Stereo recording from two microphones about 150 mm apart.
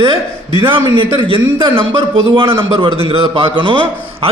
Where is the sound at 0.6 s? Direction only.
35° right (ahead or behind).